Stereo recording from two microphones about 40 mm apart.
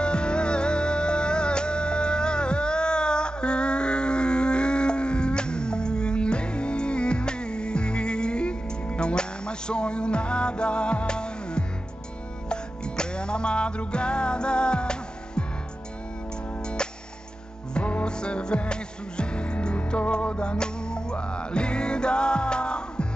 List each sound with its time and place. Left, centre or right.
0.0 s music: left
16.6 s music: left